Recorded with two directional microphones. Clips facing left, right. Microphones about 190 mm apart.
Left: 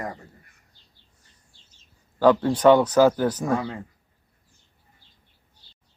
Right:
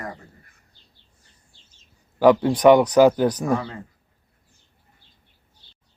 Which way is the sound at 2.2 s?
15° right (ahead or behind).